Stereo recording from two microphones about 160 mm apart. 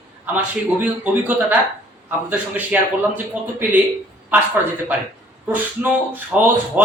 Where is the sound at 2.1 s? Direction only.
10° right (ahead or behind).